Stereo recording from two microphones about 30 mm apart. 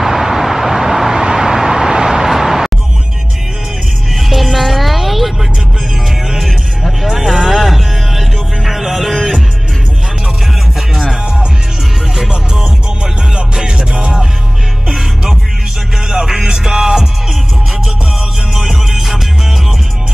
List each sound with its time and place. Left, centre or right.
0.0 s vehicle: centre
4.2 s music: centre
6.8 s vehicle: centre
7.2 s music: centre
12.3 s music: right
16.1 s music: centre
18.5 s music: centre